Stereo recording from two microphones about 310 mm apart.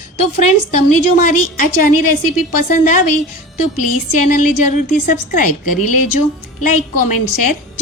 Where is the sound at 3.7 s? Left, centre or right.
Left.